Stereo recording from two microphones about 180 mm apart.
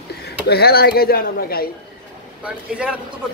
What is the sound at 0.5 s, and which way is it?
Speech, 60° left (ahead or behind).